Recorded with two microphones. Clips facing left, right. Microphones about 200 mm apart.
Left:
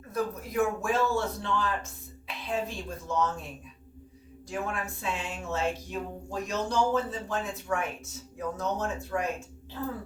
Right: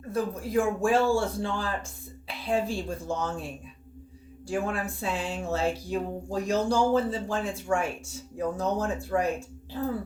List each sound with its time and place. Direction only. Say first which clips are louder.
0.1 s speech: right 4 dB; 30° right (ahead or behind)
4.4 s speech: right 4 dB; 30° right (ahead or behind)